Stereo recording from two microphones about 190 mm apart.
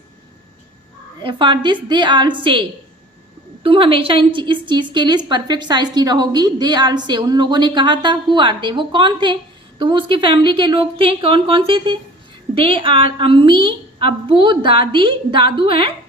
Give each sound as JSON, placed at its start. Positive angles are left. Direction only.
{"t": 1.2, "sound": "a woman's voice", "side_deg": -25}